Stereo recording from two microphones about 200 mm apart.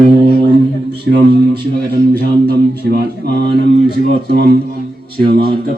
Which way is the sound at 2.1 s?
50° right (ahead or behind).